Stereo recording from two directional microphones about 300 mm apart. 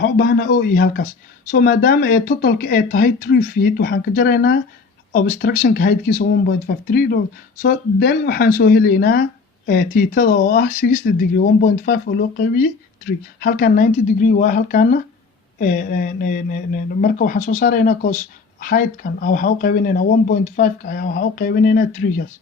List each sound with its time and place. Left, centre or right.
0.0 s speech: left